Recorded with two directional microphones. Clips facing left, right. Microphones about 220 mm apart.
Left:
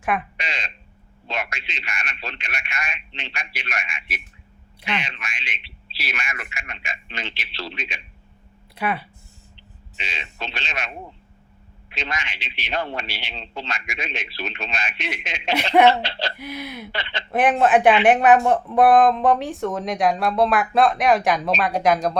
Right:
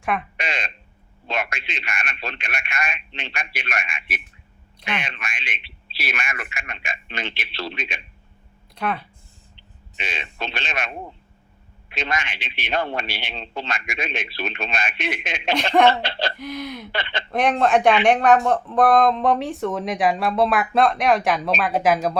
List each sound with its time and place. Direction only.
0.3 s a sound: 50° right (ahead or behind)
1.3 s a man's voice: 50° right (ahead or behind)
8.7 s speech: 5° left (ahead or behind)
10.0 s a man's voice: 55° right (ahead or behind)
15.5 s speech: 10° left (ahead or behind)
16.0 s a man's voice: 55° right (ahead or behind)
16.4 s speech: 5° left (ahead or behind)
16.9 s a man's voice: 55° right (ahead or behind)
17.3 s speech: 5° left (ahead or behind)